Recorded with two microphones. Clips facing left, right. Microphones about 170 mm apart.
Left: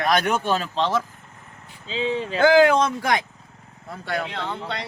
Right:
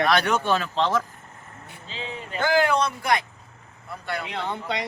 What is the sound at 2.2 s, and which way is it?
Speech, 90° left.